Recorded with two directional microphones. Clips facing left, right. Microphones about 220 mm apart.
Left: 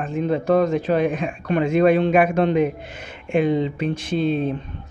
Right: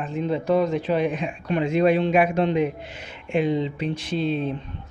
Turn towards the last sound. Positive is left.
turn(degrees=50)  # may be behind; listen again after turning